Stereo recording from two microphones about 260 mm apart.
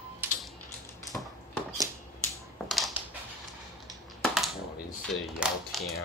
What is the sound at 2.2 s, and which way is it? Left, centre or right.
Typewriter, centre.